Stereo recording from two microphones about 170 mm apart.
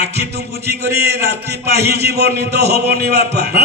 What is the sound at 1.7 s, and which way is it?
A man's voice, 75° right (ahead or behind).